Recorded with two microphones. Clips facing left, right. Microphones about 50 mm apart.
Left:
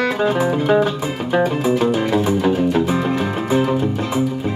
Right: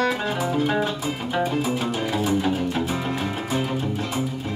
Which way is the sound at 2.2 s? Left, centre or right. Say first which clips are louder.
Left 6 dB; centre.